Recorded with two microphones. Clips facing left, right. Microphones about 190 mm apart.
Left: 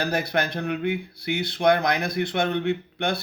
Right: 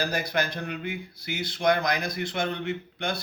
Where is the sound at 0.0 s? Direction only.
60° left (ahead or behind).